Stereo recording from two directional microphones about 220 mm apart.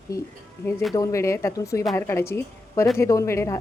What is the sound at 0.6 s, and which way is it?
Speech, 10° left (ahead or behind).